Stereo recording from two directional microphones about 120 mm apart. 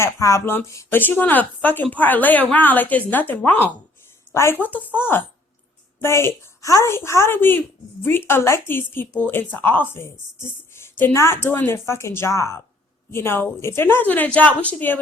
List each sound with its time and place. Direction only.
0.0 s a woman's voice: 25° left (ahead or behind)